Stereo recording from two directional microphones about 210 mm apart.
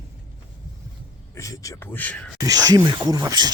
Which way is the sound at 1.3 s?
15° left (ahead or behind).